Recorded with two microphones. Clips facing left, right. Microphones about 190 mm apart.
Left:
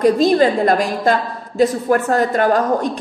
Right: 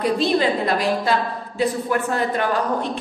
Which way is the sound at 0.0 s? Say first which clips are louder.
Left 6 dB; 45° left (ahead or behind).